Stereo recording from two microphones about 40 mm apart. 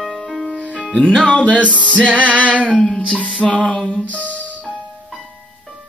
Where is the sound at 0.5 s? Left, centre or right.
Right.